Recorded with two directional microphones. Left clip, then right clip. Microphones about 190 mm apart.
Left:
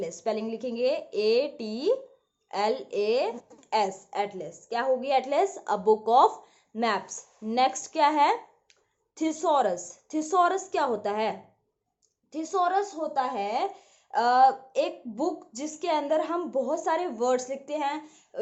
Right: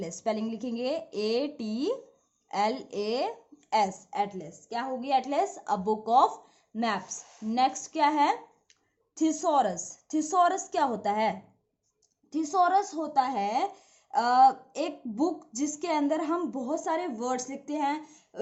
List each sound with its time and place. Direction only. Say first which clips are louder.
0.0 s speech: left 2 dB; 25° right (ahead or behind)